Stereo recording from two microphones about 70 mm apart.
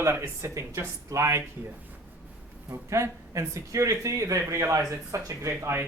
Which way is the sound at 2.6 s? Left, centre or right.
Right.